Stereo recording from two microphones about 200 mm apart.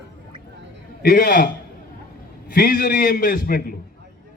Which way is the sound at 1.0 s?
45° left (ahead or behind).